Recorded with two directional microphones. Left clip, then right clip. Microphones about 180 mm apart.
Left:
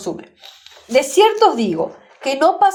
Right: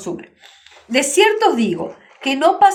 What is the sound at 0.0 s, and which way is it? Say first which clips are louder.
Speech: left 1 dB; 35° left (ahead or behind).